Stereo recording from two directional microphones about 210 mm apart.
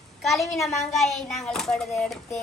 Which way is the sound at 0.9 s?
Centre (ahead or behind).